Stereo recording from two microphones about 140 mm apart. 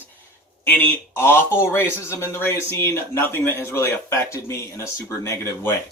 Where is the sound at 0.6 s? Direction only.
15° left (ahead or behind).